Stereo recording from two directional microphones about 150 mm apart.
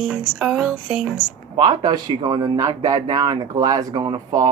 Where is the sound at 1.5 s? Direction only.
30° right (ahead or behind).